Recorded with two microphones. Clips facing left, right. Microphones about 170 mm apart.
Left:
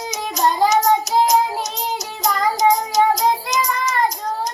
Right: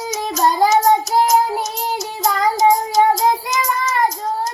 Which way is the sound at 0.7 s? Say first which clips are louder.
Right 2 dB; 15° left (ahead or behind).